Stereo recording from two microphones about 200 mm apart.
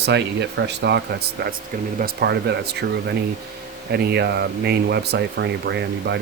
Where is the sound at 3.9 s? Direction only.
55° right (ahead or behind).